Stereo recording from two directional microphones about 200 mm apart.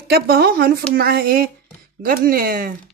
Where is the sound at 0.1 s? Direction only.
50° right (ahead or behind).